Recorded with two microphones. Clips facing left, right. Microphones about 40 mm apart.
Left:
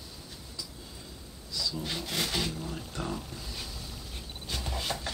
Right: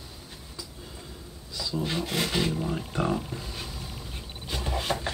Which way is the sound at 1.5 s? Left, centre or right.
Right.